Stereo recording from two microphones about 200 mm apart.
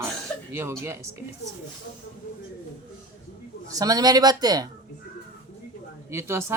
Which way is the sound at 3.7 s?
20° right (ahead or behind).